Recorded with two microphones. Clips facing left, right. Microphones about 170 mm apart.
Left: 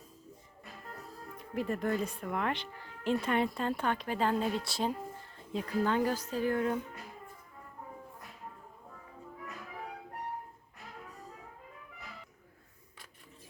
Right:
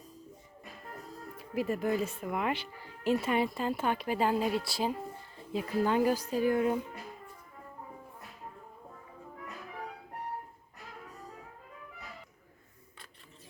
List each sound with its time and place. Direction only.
1.4 s speech: 5° right (ahead or behind)